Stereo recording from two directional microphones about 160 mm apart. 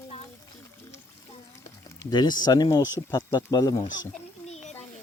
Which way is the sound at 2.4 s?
25° left (ahead or behind).